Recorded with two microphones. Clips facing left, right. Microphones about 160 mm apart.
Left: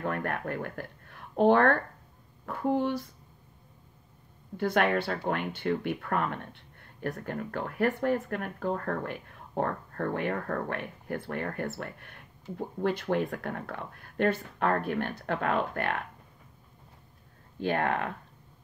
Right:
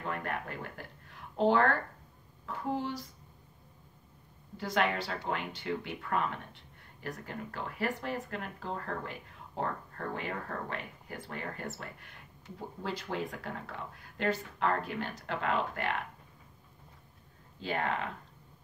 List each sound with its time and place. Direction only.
0.0 s a woman's voice: 60° left (ahead or behind)
4.6 s speech: 55° left (ahead or behind)
17.6 s speech: 60° left (ahead or behind)